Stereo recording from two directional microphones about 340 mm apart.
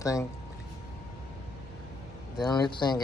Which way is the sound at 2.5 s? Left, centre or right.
Centre.